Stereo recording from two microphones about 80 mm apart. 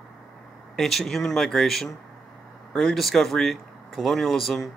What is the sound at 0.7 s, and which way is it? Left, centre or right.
Speech, centre.